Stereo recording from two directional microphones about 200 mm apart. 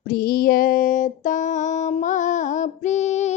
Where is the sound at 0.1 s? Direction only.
50° left (ahead or behind).